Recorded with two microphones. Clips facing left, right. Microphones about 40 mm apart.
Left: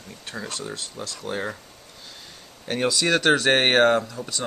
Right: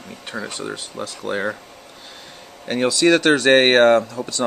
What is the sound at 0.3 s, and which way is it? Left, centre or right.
Speech, right.